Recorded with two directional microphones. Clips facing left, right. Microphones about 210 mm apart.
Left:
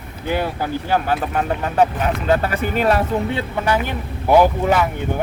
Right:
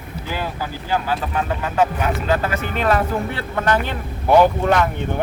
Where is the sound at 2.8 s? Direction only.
30° left (ahead or behind).